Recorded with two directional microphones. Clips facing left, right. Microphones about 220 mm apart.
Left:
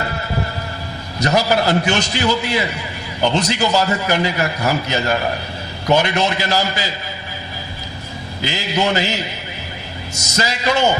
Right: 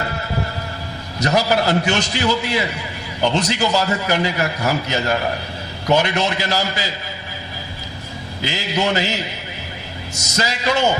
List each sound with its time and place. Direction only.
1.2 s a man's voice: 15° left (ahead or behind)
8.4 s a man's voice: 15° left (ahead or behind)
10.3 s a man's voice: 10° left (ahead or behind)